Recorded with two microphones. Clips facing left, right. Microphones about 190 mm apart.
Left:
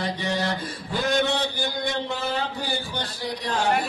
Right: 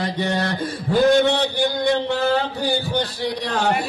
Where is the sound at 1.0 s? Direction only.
65° right (ahead or behind).